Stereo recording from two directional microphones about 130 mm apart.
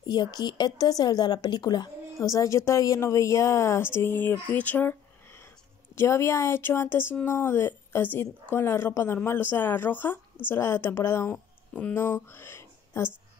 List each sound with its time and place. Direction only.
0.0 s a woman's voice: 30° left (ahead or behind)